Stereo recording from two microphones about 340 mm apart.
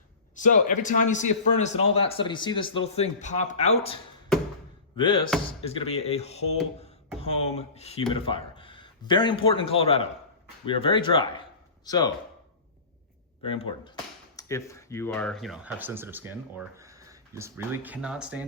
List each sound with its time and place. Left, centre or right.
0.3 s a man's voice: left
4.9 s a man's voice: centre
7.5 s a man's voice: centre
13.4 s a man's voice: centre